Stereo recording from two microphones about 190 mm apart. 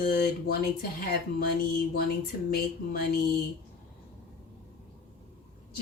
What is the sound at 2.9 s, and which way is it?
Speech, 55° left (ahead or behind).